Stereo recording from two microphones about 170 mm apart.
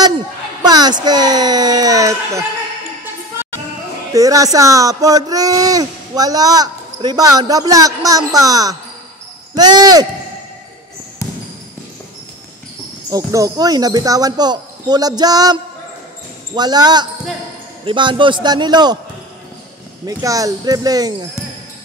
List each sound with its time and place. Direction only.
0.6 s speech: 25° right (ahead or behind)
4.1 s speech: 20° right (ahead or behind)
13.1 s speech: 20° right (ahead or behind)
20.1 s speech: 20° right (ahead or behind)